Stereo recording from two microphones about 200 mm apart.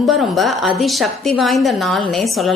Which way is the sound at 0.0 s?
Centre (ahead or behind).